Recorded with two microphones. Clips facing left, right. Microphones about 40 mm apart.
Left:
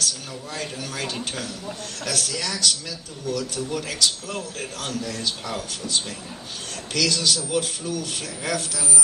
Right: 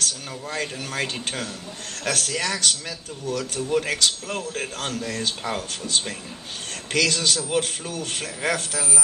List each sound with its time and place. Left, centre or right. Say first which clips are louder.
0.0 s a man's voice: even; right